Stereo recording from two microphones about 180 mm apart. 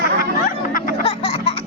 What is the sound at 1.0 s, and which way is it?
Music, 35° left (ahead or behind).